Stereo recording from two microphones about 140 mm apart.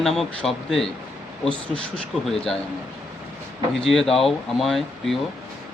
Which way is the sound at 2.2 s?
5° left (ahead or behind).